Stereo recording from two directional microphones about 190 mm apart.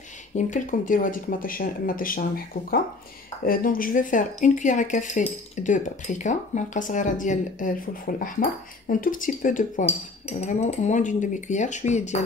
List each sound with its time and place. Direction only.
0.4 s speech: 45° left (ahead or behind)
3.4 s speech: 50° left (ahead or behind)